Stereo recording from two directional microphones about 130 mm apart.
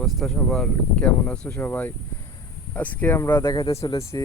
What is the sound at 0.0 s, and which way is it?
Speech, centre (ahead or behind).